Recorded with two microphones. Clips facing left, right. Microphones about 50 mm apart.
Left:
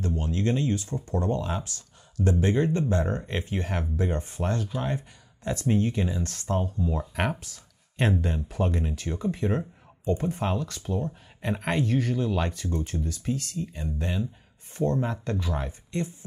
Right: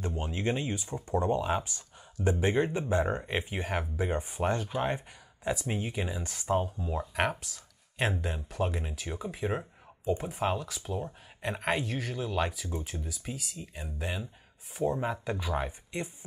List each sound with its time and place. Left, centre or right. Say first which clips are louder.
0.0 s speech: left 4 dB; centre
5.5 s speech: left 7 dB; centre